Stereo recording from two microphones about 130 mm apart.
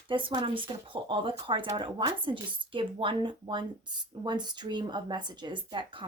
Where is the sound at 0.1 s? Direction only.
40° right (ahead or behind).